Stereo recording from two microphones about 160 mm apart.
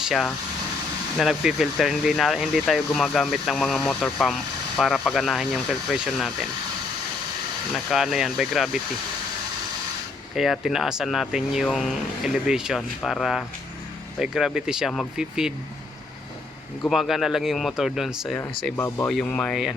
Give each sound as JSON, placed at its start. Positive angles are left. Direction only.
{"t": 0.0, "sound": "speech", "side_deg": 0}
{"t": 7.7, "sound": "speech", "side_deg": 0}
{"t": 10.3, "sound": "speech", "side_deg": 0}
{"t": 16.8, "sound": "speech", "side_deg": 0}
{"t": 18.8, "sound": "speech", "side_deg": 15}